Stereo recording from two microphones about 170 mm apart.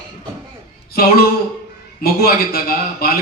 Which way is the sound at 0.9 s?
65° left (ahead or behind).